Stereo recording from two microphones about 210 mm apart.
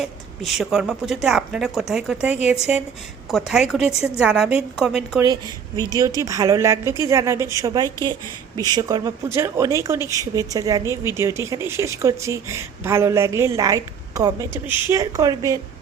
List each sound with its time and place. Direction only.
0.0 s a woman's voice: centre (ahead or behind)
5.9 s speech: 15° right (ahead or behind)